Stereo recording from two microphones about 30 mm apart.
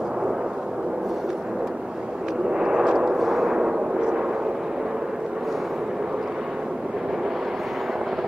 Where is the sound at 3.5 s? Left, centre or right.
Right.